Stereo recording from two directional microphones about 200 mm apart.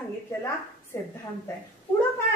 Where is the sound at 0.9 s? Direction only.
15° left (ahead or behind).